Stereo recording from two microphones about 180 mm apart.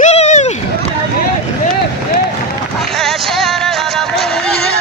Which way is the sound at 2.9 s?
Centre (ahead or behind).